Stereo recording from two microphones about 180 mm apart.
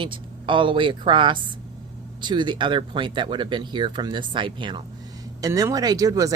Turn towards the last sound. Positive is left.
turn(degrees=-20)  # may be behind; listen again after turning